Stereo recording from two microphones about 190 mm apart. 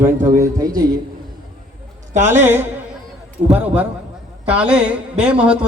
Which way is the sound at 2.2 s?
10° right (ahead or behind).